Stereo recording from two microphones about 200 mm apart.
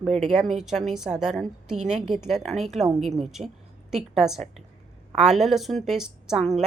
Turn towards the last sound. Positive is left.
turn(degrees=-5)  # may be behind; listen again after turning